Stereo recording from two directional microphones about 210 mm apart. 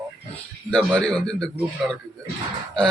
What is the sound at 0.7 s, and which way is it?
Speech, 5° left (ahead or behind).